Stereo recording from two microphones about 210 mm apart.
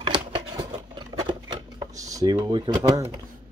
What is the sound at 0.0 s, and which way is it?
Scissors, 25° right (ahead or behind).